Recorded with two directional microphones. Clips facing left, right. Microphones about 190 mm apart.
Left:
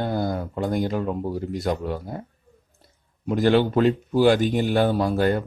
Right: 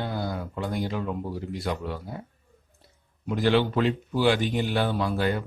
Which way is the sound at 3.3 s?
45° left (ahead or behind).